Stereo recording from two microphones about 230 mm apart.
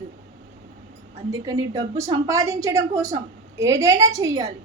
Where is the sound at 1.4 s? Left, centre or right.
Centre.